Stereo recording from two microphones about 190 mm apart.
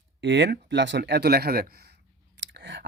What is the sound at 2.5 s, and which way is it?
Whispering, 70° right (ahead or behind).